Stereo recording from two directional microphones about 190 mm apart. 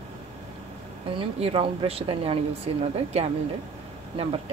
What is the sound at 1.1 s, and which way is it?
Speech, 30° right (ahead or behind).